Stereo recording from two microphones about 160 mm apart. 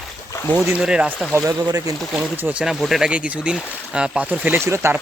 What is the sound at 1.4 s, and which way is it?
Speech, 25° right (ahead or behind).